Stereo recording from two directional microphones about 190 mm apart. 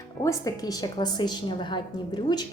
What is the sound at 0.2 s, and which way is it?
Speech, 15° left (ahead or behind).